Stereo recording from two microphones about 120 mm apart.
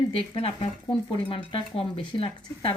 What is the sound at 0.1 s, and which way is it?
Speech, 50° left (ahead or behind).